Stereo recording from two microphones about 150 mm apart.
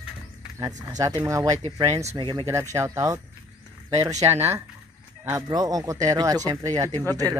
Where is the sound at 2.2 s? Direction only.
30° right (ahead or behind).